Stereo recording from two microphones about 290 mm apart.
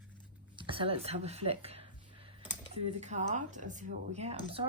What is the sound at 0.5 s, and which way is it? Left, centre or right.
Speech, centre.